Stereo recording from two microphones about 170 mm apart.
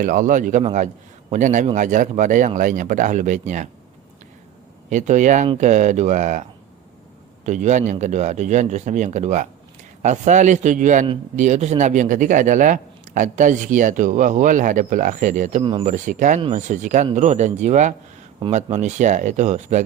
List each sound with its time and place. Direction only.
0.0 s a man's voice: 50° right (ahead or behind)
4.9 s a man's voice: 45° right (ahead or behind)
7.4 s a man's voice: 45° right (ahead or behind)
15.6 s speech: 35° right (ahead or behind)
15.9 s a man's voice: 50° right (ahead or behind)